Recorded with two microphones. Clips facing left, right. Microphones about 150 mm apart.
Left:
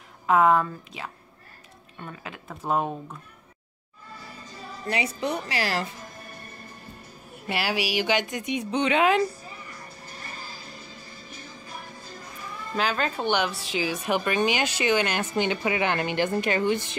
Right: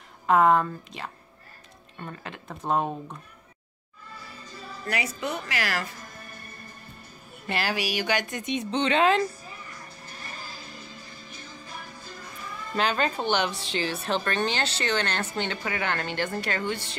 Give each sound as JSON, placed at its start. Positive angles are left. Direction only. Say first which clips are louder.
{"t": 0.3, "sound": "speech", "louder": "even", "side_deg": 5}
{"t": 4.8, "sound": "a woman's voice", "louder": "left 3 dB", "side_deg": 30}
{"t": 7.4, "sound": "a woman's voice", "louder": "left 1 dB", "side_deg": 10}
{"t": 12.7, "sound": "a woman's voice", "louder": "right 1 dB", "side_deg": 5}